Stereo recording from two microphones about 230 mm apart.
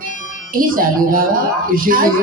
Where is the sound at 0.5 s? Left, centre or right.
Right.